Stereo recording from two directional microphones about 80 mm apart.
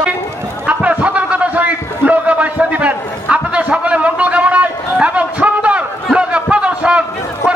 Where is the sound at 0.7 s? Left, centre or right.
Centre.